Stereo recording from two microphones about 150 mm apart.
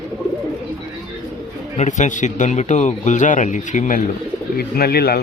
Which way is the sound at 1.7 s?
55° left (ahead or behind).